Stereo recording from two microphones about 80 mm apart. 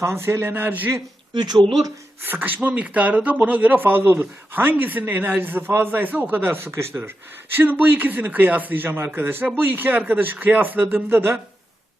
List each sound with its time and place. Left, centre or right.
0.0 s a man's voice: right
1.3 s speech: right
2.2 s a man's voice: right